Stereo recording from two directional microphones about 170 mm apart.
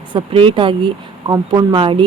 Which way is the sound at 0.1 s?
30° right (ahead or behind).